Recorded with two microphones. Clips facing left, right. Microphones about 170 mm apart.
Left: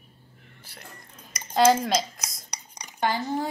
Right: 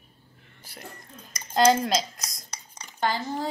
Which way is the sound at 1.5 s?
Centre (ahead or behind).